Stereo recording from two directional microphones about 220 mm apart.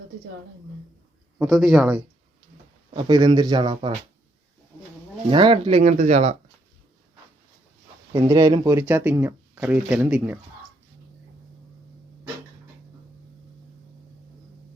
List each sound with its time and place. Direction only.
1.4 s a man's voice: centre (ahead or behind)
2.9 s speech: 20° right (ahead or behind)
5.3 s speech: 20° right (ahead or behind)
8.1 s speech: 15° right (ahead or behind)